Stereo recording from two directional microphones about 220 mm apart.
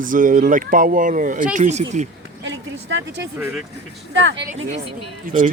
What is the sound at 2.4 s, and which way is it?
Speech, 55° right (ahead or behind).